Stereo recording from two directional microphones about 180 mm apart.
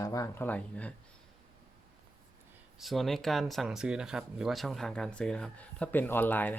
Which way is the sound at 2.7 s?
Centre (ahead or behind).